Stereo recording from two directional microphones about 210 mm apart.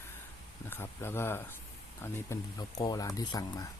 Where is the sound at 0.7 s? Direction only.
10° left (ahead or behind).